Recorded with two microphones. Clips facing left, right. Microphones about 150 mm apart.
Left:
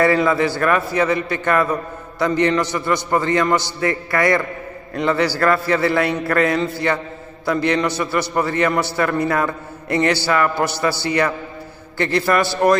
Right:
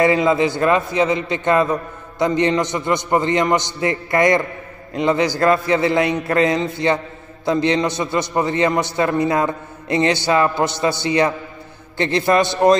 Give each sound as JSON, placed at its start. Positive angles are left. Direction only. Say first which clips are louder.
{"t": 0.0, "sound": "a man's voice", "louder": "right 1 dB", "side_deg": -20}